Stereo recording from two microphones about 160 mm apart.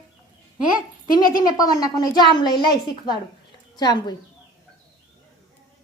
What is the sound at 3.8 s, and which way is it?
Speech, 25° left (ahead or behind).